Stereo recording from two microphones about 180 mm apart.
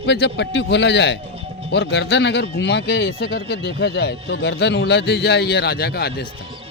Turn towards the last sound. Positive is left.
turn(degrees=60)  # may be behind; listen again after turning